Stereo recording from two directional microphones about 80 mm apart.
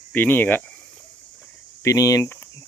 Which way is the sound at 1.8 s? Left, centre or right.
Left.